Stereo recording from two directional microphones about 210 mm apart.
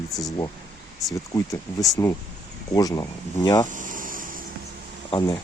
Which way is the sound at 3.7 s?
40° right (ahead or behind).